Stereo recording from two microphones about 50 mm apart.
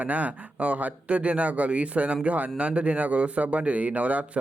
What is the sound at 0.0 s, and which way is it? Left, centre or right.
Speech, right.